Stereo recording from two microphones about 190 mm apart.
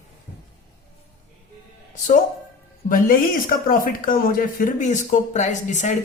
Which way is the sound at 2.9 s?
45° left (ahead or behind).